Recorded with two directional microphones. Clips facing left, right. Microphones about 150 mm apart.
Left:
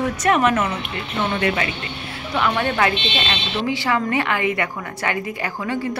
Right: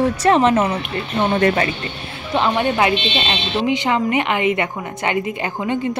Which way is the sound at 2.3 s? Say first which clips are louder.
Right 3 dB; 25° right (ahead or behind).